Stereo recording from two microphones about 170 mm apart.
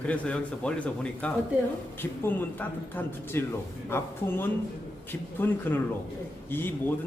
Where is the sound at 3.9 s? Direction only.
15° left (ahead or behind).